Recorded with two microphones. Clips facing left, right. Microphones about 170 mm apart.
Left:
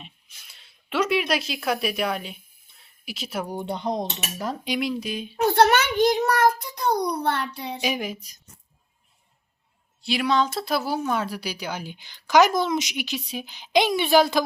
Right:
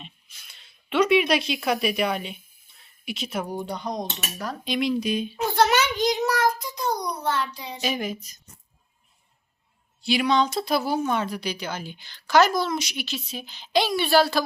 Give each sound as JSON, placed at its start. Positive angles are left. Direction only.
{"t": 0.5, "sound": "speech", "side_deg": 5}
{"t": 3.5, "sound": "speech", "side_deg": 25}
{"t": 4.6, "sound": "speech", "side_deg": 10}
{"t": 5.4, "sound": "a child's voice", "side_deg": 60}
{"t": 7.8, "sound": "speech", "side_deg": 10}
{"t": 10.0, "sound": "speech", "side_deg": 0}